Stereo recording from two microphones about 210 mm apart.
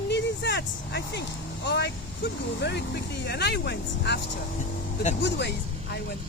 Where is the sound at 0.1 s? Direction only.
55° left (ahead or behind).